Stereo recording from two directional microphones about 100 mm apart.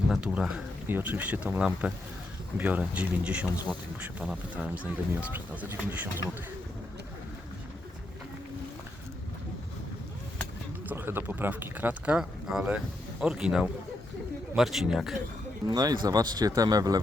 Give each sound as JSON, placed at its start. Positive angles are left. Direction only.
{"t": 0.1, "sound": "speech", "side_deg": -5}
{"t": 0.9, "sound": "speech", "side_deg": -20}
{"t": 4.5, "sound": "speech", "side_deg": -15}
{"t": 10.8, "sound": "speech", "side_deg": -20}
{"t": 15.6, "sound": "speech", "side_deg": -40}